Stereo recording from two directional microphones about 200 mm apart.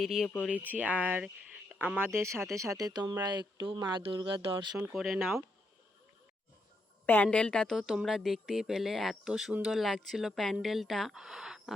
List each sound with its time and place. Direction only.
0.0 s a woman's voice: centre (ahead or behind); by 4.5 s 25° right (ahead or behind)
4.8 s a woman's voice: centre (ahead or behind)
7.0 s a woman's voice: 10° left (ahead or behind)